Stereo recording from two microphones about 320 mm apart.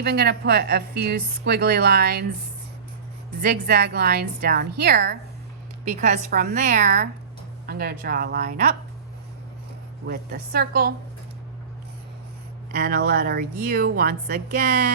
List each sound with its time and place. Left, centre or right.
0.0 s speech: right
3.4 s speech: right
10.1 s speech: right
12.7 s speech: right